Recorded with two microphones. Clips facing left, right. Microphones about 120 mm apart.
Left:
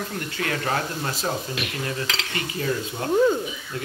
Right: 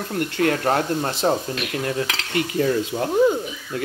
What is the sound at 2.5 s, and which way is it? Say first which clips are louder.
Speech: right 6 dB; 40° right (ahead or behind).